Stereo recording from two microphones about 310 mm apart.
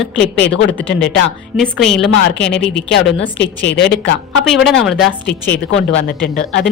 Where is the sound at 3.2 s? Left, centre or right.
Left.